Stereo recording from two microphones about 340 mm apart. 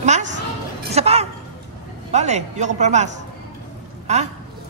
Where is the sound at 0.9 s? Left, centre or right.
Centre.